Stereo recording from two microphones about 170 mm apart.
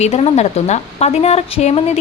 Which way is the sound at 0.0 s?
40° left (ahead or behind).